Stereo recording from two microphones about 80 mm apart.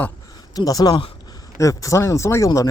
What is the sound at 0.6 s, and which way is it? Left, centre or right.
Speech, left.